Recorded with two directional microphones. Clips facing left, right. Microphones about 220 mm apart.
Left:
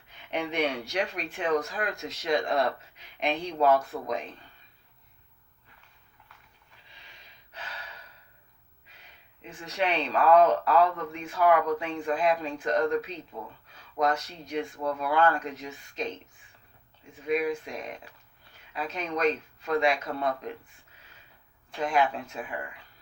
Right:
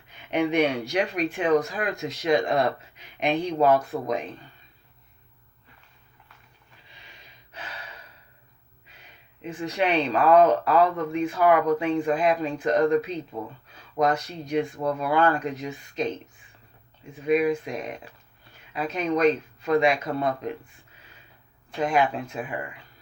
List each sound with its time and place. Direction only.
0.3 s speech: 10° right (ahead or behind)
7.6 s gasp: 15° right (ahead or behind)
9.4 s speech: 10° right (ahead or behind)
13.4 s speech: 20° right (ahead or behind)
17.2 s speech: 10° right (ahead or behind)
21.8 s speech: 15° right (ahead or behind)